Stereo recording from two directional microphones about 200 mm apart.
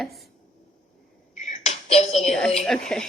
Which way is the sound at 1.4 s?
35° left (ahead or behind).